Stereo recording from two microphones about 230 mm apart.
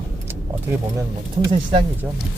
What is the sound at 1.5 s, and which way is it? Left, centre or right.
Speech, right.